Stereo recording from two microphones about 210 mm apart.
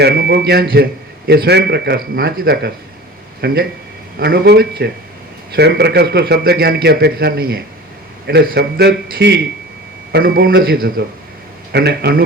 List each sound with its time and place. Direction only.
0.0 s a man's voice: 50° right (ahead or behind)